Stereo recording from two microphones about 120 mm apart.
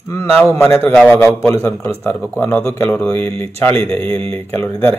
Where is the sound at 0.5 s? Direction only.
20° left (ahead or behind).